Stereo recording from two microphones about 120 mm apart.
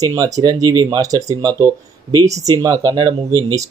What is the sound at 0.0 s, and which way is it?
Speech, 30° right (ahead or behind).